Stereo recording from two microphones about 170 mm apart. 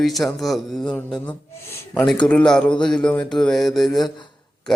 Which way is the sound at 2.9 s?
5° left (ahead or behind).